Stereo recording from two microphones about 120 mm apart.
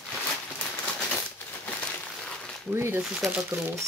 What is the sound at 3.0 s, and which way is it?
Speech, centre (ahead or behind).